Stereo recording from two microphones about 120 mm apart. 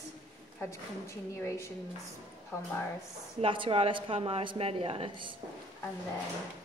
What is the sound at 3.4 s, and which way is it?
Speech, 45° right (ahead or behind).